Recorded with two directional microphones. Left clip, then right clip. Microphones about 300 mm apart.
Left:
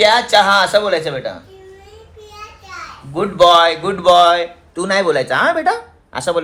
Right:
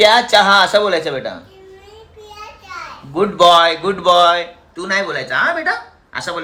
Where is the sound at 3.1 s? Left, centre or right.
Centre.